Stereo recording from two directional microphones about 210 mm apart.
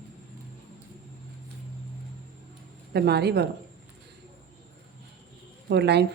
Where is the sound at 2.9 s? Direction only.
50° right (ahead or behind).